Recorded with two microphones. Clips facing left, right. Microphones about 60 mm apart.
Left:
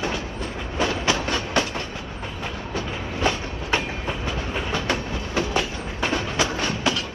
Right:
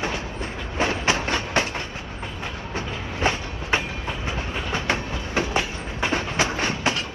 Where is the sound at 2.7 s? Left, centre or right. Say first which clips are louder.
Left 2 dB; right.